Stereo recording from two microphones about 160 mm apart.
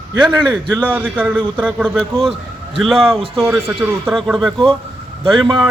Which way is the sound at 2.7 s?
Centre (ahead or behind).